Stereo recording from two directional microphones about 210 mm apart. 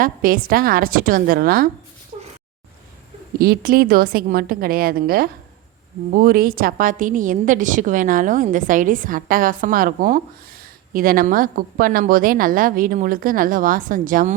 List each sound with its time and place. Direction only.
0.0 s a woman's voice: 40° right (ahead or behind)
2.1 s cat: 30° right (ahead or behind)
3.3 s a woman's voice: 45° right (ahead or behind)